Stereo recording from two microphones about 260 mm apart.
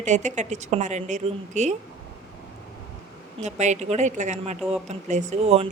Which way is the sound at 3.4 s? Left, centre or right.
Right.